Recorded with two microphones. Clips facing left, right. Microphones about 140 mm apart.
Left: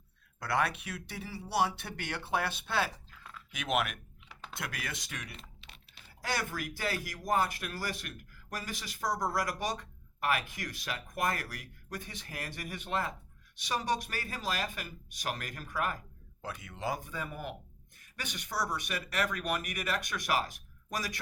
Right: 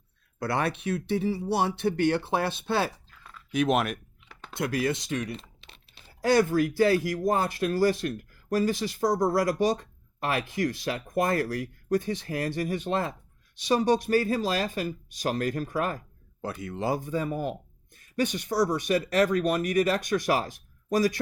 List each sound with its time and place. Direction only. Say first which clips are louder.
0.3 s speech: right 4 dB; 30° right (ahead or behind)
3.1 s a sound: even; centre (ahead or behind)
3.5 s speech: right 8 dB; 35° right (ahead or behind)